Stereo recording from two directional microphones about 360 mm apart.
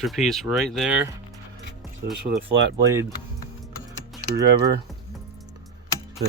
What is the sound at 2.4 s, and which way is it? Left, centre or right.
Speech, right.